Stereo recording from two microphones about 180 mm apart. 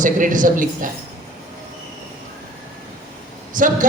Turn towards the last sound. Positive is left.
turn(degrees=-45)  # may be behind; listen again after turning